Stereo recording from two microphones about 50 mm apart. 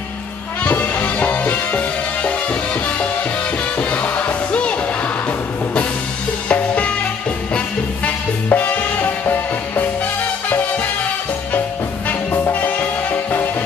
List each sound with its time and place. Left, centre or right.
0.7 s music: left
3.9 s music: left
6.5 s music: left
8.5 s music: left
12.5 s music: left